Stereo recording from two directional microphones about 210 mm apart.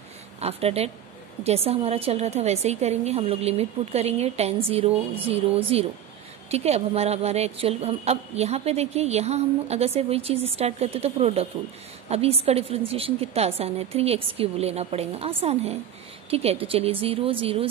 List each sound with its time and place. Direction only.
0.4 s a woman's voice: 30° right (ahead or behind)